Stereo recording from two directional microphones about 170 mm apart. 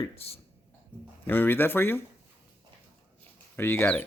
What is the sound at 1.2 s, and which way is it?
Speech, 10° left (ahead or behind).